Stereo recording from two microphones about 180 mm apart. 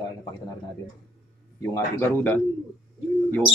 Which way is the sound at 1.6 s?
10° left (ahead or behind).